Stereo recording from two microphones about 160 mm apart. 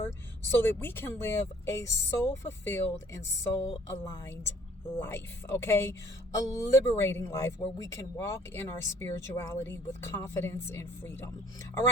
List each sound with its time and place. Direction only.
0.5 s speech: 15° left (ahead or behind)